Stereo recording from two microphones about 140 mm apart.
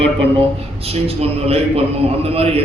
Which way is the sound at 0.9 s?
45° right (ahead or behind).